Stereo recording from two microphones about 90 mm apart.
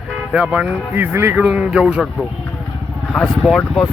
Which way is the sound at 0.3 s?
15° right (ahead or behind).